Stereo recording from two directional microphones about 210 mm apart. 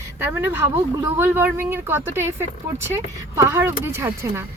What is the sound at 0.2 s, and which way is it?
Speech, 10° right (ahead or behind).